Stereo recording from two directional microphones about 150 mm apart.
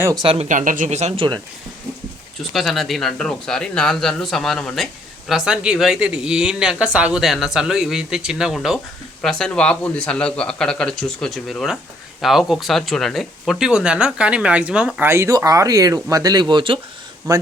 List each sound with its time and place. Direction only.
0.2 s speech: 40° right (ahead or behind)
0.4 s speech: 60° right (ahead or behind)
2.4 s speech: centre (ahead or behind); by 17.4 s 25° right (ahead or behind)